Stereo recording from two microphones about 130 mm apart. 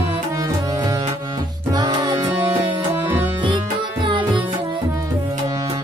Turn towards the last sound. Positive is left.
turn(degrees=-40)  # may be behind; listen again after turning